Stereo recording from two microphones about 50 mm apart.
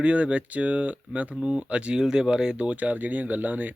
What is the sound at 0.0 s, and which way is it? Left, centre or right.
Speech, right.